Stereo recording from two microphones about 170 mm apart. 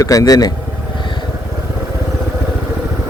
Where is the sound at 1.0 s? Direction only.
25° left (ahead or behind).